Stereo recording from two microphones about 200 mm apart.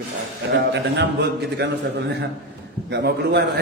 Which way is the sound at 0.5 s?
55° right (ahead or behind).